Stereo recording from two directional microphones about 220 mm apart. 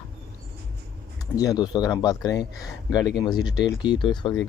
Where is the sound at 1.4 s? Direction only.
15° left (ahead or behind).